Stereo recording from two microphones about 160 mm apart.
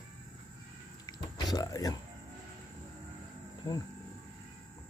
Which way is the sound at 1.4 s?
25° left (ahead or behind).